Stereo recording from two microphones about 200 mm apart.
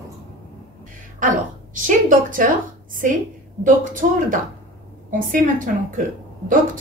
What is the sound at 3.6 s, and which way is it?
A woman's voice, 40° right (ahead or behind).